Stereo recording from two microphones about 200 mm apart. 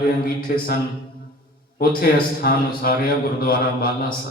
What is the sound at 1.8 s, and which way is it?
A man's voice, 50° left (ahead or behind).